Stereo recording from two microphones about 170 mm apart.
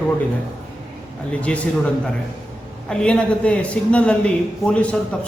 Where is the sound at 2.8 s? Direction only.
5° left (ahead or behind).